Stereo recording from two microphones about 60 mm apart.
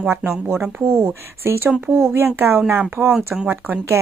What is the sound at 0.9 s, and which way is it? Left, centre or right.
Speech, right.